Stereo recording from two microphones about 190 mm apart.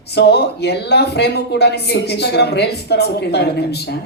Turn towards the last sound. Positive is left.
turn(degrees=60)  # may be behind; listen again after turning